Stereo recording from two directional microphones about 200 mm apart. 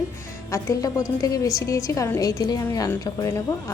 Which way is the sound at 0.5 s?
15° left (ahead or behind).